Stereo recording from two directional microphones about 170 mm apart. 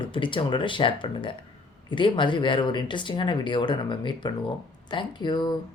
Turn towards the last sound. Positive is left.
turn(degrees=25)  # may be behind; listen again after turning